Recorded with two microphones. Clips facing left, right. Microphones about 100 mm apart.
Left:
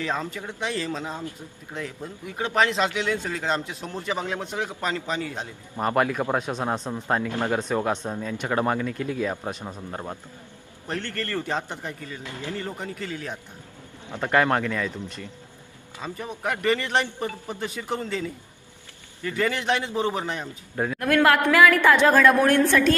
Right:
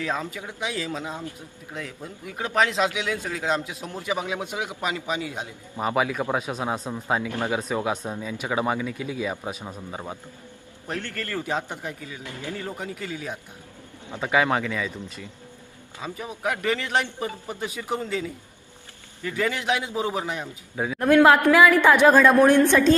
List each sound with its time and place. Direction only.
0.0 s speech: centre (ahead or behind)
12.2 s speech: 20° left (ahead or behind)
12.5 s speech: 5° right (ahead or behind)
16.0 s speech: 5° right (ahead or behind)
21.5 s a woman's voice: 15° right (ahead or behind)